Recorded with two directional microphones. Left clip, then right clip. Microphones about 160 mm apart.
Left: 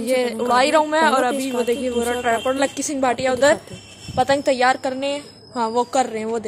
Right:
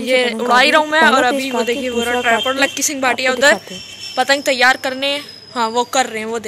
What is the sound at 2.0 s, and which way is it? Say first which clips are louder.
A woman's voice: right 6 dB; 15° left (ahead or behind).